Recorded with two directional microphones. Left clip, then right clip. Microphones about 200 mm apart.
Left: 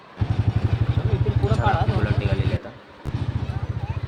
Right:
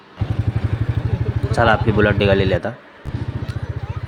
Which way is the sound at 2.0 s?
40° right (ahead or behind).